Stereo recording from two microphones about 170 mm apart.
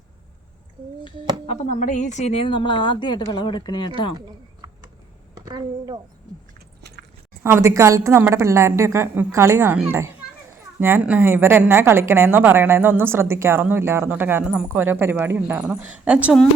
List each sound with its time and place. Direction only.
1.5 s a woman's voice: 45° left (ahead or behind); by 4.1 s 25° left (ahead or behind)
4.6 s a sound: 20° right (ahead or behind)
5.5 s a woman's voice: 25° right (ahead or behind)
6.8 s chewing: 75° right (ahead or behind)
7.4 s speech: 15° right (ahead or behind)